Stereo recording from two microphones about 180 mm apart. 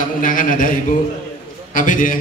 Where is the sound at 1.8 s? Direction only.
50° left (ahead or behind).